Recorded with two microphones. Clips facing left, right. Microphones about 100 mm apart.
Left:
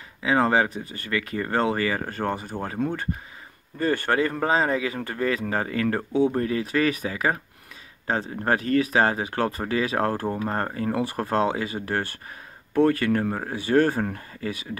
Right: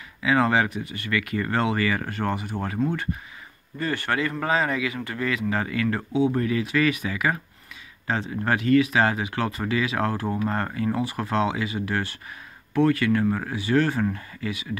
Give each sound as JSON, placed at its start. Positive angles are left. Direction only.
{"t": 0.2, "sound": "speech", "side_deg": 35}
{"t": 3.8, "sound": "speech", "side_deg": 35}
{"t": 13.3, "sound": "speech", "side_deg": 30}
{"t": 13.6, "sound": "speech", "side_deg": 45}